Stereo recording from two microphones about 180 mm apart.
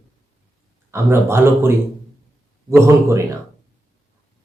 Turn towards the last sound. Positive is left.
turn(degrees=-15)  # may be behind; listen again after turning